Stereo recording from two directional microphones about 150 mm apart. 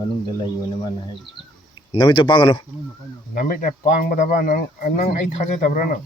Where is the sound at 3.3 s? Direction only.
65° left (ahead or behind).